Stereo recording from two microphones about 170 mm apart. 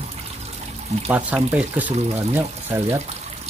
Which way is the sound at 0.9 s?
40° right (ahead or behind).